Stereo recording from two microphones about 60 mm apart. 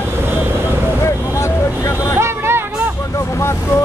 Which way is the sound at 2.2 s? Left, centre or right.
Right.